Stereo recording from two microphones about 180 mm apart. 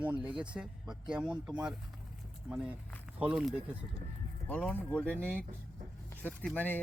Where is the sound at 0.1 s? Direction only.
10° right (ahead or behind).